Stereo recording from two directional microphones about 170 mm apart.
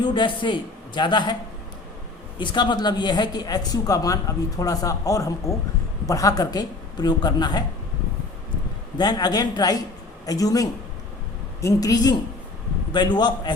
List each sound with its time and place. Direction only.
0.0 s speech: 25° left (ahead or behind)
2.4 s speech: 25° left (ahead or behind)
9.0 s speech: 25° left (ahead or behind)